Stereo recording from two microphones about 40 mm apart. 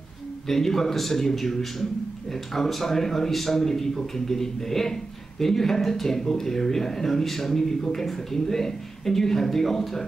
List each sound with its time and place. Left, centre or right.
0.5 s speech: centre